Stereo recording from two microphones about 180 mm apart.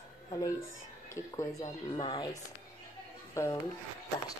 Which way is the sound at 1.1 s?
20° left (ahead or behind).